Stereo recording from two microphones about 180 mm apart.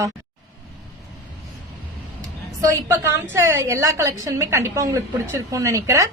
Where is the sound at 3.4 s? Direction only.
15° right (ahead or behind).